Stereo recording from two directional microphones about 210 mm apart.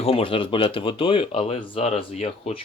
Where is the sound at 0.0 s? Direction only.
25° left (ahead or behind).